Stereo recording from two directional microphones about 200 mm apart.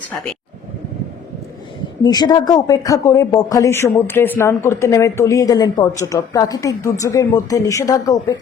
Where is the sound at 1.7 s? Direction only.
20° left (ahead or behind).